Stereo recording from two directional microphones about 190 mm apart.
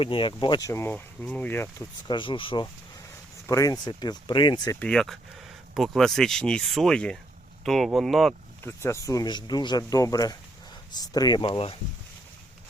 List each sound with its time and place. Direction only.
0.0 s speech: 25° left (ahead or behind); by 1.7 s 10° left (ahead or behind)
2.0 s speech: 25° left (ahead or behind)
3.4 s speech: 15° left (ahead or behind)
4.8 s speech: 5° left (ahead or behind)
8.6 s speech: 15° left (ahead or behind); by 11.8 s 30° left (ahead or behind)